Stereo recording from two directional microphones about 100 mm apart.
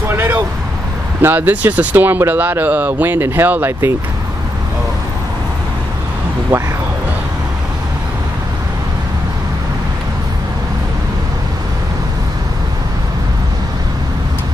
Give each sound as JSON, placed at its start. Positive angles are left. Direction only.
{"t": 0.1, "sound": "vehicle", "side_deg": -20}
{"t": 1.2, "sound": "speech", "side_deg": -20}
{"t": 6.5, "sound": "speech", "side_deg": -20}